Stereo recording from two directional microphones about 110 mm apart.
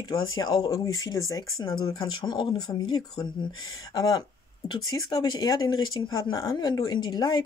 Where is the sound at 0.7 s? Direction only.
30° left (ahead or behind).